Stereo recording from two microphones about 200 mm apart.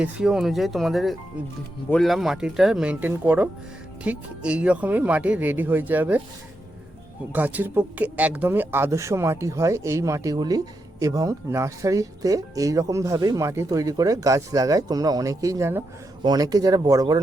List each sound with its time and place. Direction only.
0.0 s speech: 5° right (ahead or behind)
7.3 s speech: 10° right (ahead or behind)